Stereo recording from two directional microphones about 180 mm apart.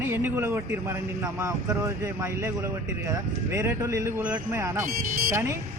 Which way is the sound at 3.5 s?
15° right (ahead or behind).